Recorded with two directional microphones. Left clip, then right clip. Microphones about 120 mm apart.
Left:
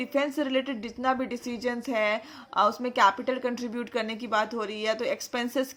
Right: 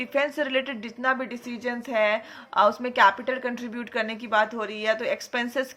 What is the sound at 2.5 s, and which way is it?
A woman's voice, 35° left (ahead or behind).